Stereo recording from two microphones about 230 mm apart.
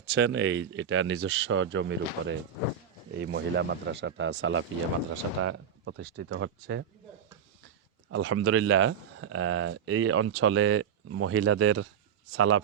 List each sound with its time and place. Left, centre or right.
0.0 s a man's voice: right
8.1 s a man's voice: right